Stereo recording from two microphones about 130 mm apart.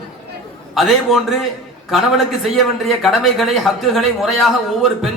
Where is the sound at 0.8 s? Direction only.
Centre (ahead or behind).